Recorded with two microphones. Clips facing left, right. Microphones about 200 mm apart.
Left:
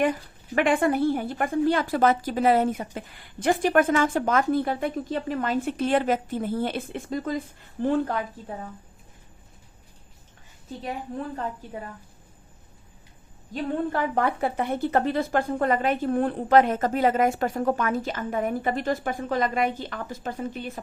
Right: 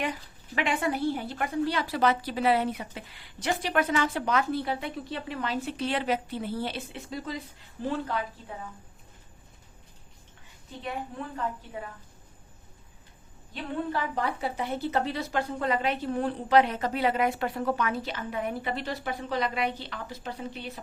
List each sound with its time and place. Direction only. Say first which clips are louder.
0.0 s a woman's voice: left 8 dB; 50° left (ahead or behind)
11.3 s a woman's voice: left 1 dB; 40° left (ahead or behind)
13.5 s a woman's voice: left 5 dB; 55° left (ahead or behind)